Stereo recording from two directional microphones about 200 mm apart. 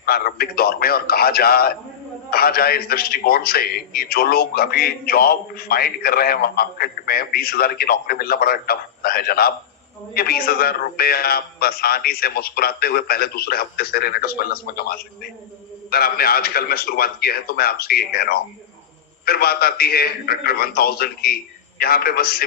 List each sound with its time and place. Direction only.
0.0 s a man's voice: 50° left (ahead or behind)